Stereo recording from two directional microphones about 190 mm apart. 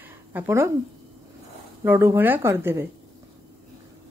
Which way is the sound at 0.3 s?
10° right (ahead or behind).